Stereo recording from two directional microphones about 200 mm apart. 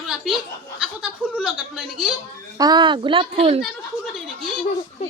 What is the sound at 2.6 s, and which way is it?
Speech, 20° right (ahead or behind).